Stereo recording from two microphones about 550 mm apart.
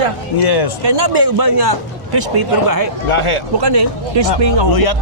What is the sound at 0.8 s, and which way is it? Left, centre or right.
Speech, right.